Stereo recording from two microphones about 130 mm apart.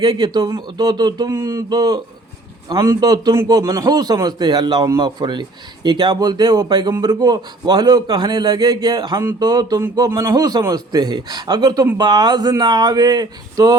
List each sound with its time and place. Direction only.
0.0 s a man's voice: 40° right (ahead or behind)